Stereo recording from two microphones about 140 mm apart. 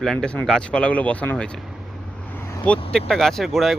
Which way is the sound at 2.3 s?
15° left (ahead or behind).